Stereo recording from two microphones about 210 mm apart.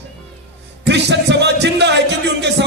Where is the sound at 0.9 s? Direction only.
55° right (ahead or behind).